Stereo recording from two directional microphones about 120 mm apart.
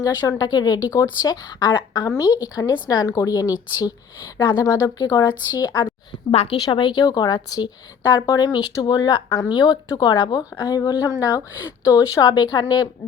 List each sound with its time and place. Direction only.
0.0 s speech: 35° left (ahead or behind)
6.3 s speech: 50° left (ahead or behind); by 12.9 s 35° left (ahead or behind)